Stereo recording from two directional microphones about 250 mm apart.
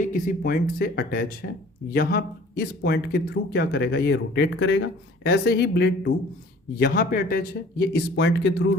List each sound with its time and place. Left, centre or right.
0.0 s speech: left